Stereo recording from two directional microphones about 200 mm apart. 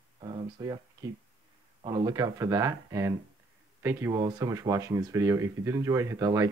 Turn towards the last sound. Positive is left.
turn(degrees=-15)  # may be behind; listen again after turning